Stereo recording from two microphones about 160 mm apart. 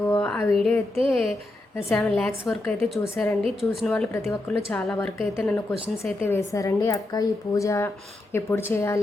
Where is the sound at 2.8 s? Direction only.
15° left (ahead or behind).